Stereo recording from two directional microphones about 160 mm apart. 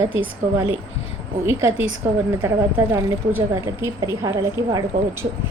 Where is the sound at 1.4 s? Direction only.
15° right (ahead or behind).